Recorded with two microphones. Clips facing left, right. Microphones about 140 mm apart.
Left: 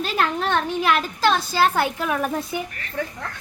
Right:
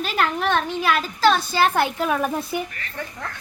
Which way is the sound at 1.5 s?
20° right (ahead or behind).